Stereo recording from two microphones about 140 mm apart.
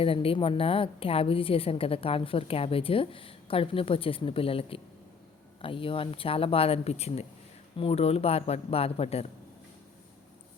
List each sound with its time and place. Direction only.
0.0 s a woman's voice: 40° left (ahead or behind)